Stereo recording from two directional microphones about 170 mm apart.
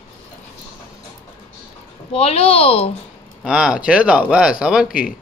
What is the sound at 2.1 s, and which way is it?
Speech, 35° left (ahead or behind).